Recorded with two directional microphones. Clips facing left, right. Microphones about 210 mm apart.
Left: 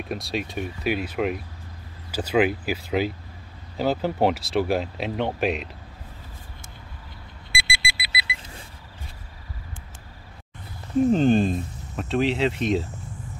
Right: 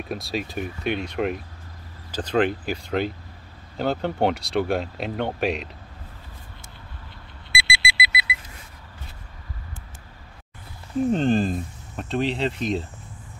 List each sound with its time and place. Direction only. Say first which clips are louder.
0.1 s speech: even; centre (ahead or behind)
7.5 s alarm clock: right 4 dB; 45° left (ahead or behind)
11.1 s speech: left 1 dB; centre (ahead or behind)